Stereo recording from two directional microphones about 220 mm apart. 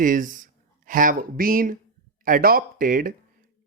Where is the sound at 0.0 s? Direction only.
35° right (ahead or behind).